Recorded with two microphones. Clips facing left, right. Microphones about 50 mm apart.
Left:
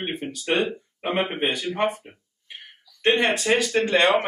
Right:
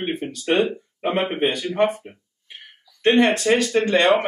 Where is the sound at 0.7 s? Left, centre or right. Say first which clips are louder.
Right 3 dB; centre.